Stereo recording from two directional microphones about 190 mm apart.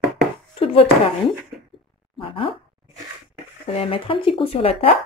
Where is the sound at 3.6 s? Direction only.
30° left (ahead or behind).